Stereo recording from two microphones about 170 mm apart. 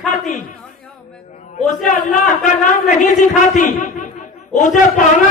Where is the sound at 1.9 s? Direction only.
50° left (ahead or behind).